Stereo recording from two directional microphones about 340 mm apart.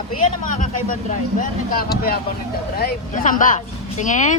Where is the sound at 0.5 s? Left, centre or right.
Left.